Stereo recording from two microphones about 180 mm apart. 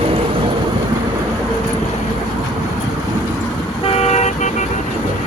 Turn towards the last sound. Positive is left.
turn(degrees=40)  # may be behind; listen again after turning